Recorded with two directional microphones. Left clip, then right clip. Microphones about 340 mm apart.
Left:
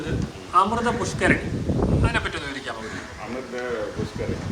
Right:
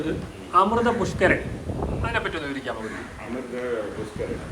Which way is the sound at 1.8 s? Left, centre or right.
Left.